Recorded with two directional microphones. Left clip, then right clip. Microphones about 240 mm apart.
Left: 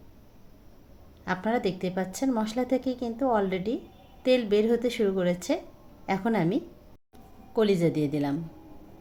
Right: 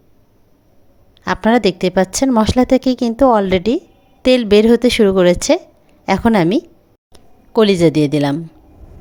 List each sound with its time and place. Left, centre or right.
1.2 s a woman's voice: right